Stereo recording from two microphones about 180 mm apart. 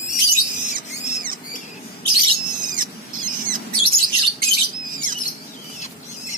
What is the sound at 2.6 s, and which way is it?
Rodents, 50° right (ahead or behind).